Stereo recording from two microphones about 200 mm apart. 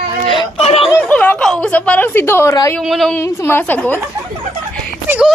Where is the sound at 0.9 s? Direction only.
10° left (ahead or behind).